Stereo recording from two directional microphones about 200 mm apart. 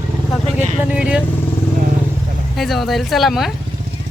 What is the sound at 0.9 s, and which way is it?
Speech, 5° right (ahead or behind).